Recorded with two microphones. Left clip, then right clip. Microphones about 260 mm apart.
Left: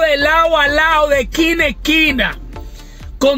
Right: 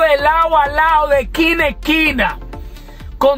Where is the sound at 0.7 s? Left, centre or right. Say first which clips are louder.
Even; right.